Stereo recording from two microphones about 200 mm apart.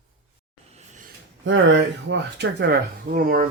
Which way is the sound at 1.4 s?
65° right (ahead or behind).